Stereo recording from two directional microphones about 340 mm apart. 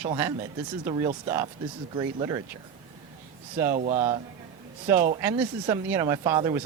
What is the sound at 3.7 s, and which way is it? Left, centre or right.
Speech, centre.